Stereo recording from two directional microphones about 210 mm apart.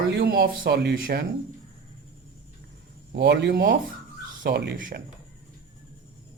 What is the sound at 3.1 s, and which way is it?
Speech, 55° right (ahead or behind).